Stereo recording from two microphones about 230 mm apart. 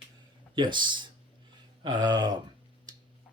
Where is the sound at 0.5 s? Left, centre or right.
Centre.